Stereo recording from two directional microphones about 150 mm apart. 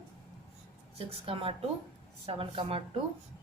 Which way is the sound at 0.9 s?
40° right (ahead or behind).